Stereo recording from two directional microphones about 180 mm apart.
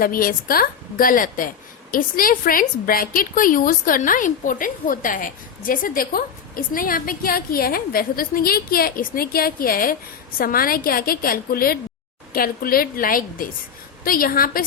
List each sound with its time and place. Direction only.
0.0 s a woman's voice: 50° left (ahead or behind)